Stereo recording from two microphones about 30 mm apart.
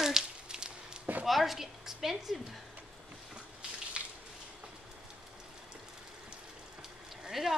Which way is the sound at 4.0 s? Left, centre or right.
Right.